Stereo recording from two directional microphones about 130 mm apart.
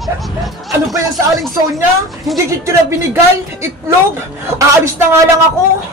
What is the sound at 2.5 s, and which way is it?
Speech, 20° right (ahead or behind).